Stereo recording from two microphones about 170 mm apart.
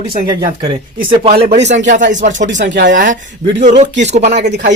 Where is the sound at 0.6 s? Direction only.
35° right (ahead or behind).